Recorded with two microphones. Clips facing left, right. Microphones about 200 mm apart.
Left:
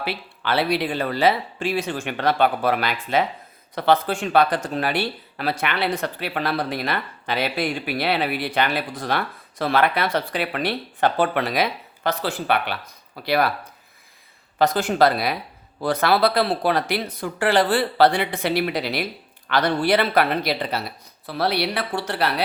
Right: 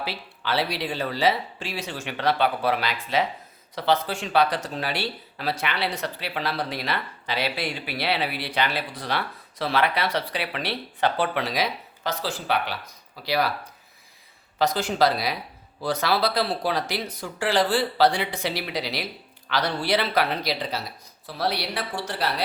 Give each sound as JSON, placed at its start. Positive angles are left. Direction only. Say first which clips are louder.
{"t": 0.0, "sound": "speech", "louder": "left 4 dB", "side_deg": 60}
{"t": 14.6, "sound": "speech", "louder": "left 4 dB", "side_deg": 55}